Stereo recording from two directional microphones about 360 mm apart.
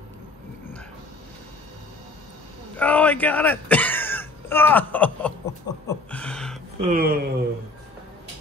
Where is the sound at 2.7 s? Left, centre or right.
Centre.